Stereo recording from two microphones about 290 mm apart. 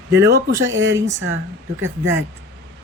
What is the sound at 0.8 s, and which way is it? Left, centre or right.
Speech, right.